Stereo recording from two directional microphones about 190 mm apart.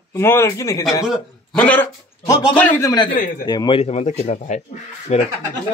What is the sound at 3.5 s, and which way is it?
Speech, 25° left (ahead or behind).